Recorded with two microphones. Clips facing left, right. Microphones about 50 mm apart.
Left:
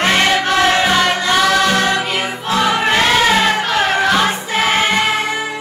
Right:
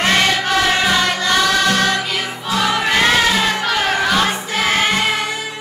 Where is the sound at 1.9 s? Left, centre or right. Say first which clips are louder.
Left 2 dB; left.